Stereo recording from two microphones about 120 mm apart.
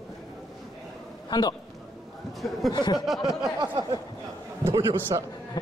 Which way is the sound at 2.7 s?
35° left (ahead or behind).